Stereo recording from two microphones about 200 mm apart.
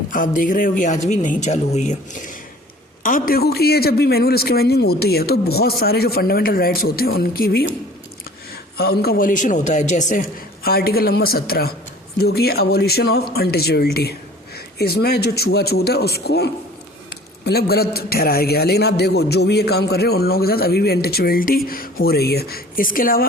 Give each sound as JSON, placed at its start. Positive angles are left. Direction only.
{"t": 0.1, "sound": "a man's voice", "side_deg": 40}
{"t": 8.8, "sound": "a man's voice", "side_deg": 50}